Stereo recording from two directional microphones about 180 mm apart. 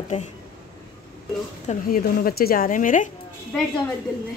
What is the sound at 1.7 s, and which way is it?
A woman's voice, 55° left (ahead or behind).